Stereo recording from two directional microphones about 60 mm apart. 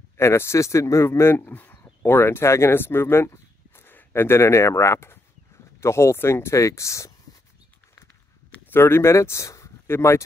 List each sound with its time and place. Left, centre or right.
0.2 s speech: left
1.4 s speech: left
2.7 s speech: left
8.6 s speech: left
9.8 s speech: left